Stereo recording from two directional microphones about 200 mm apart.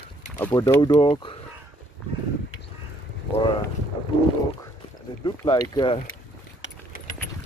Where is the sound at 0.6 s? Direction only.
20° left (ahead or behind).